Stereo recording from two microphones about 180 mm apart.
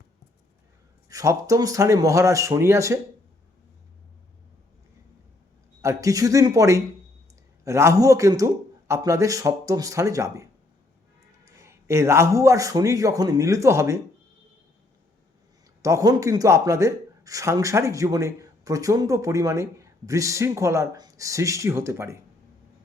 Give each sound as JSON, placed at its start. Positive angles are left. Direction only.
{"t": 1.1, "sound": "speech", "side_deg": -15}
{"t": 5.8, "sound": "speech", "side_deg": -15}
{"t": 15.8, "sound": "speech", "side_deg": -20}